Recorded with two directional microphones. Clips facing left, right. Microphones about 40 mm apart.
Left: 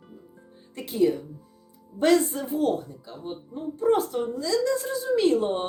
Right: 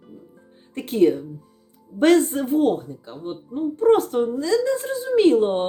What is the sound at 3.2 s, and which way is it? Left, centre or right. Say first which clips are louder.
A woman's voice: right 7 dB; right.